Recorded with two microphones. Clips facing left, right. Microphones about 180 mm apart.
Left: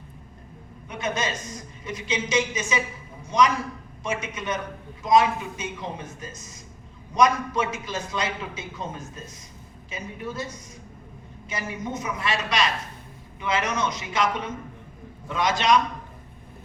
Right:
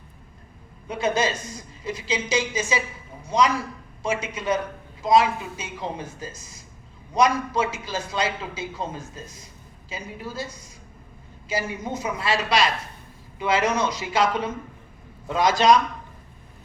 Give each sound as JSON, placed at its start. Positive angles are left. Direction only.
{"t": 0.9, "sound": "a man's voice", "side_deg": -30}